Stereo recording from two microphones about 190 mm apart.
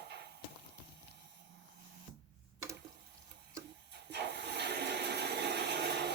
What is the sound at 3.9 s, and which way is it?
Toilet flush, 65° right (ahead or behind).